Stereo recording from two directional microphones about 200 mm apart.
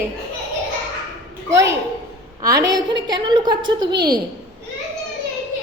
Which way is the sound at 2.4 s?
15° right (ahead or behind).